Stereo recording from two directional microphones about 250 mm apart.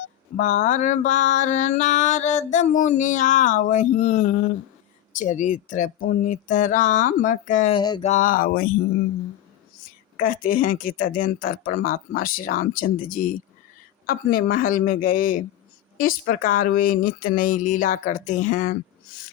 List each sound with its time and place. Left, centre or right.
0.3 s a sound: left
8.1 s speech: left
10.2 s speech: left